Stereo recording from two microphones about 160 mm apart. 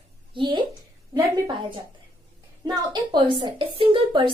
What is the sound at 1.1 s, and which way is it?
A woman's voice, 25° right (ahead or behind).